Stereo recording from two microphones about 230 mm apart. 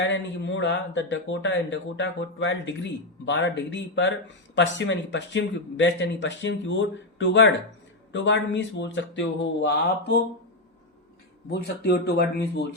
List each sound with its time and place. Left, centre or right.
0.0 s speech: left
11.5 s speech: left